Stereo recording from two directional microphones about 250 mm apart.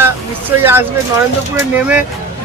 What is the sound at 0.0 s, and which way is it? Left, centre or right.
Speech, centre.